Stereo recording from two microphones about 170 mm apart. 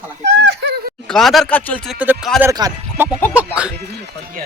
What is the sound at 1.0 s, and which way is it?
Speech, centre (ahead or behind).